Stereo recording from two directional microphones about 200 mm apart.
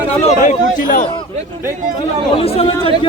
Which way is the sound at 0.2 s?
40° left (ahead or behind).